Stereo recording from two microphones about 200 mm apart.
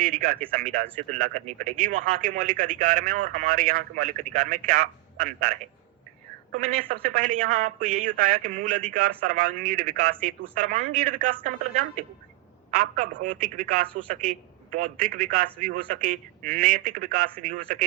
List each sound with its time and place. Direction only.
0.0 s a man's voice: 45° right (ahead or behind)